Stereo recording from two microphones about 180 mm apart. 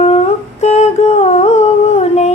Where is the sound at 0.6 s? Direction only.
40° left (ahead or behind).